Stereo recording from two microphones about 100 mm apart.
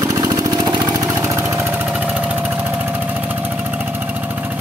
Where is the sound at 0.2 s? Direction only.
40° right (ahead or behind).